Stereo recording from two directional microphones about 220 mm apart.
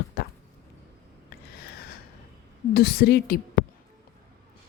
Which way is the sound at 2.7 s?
45° left (ahead or behind).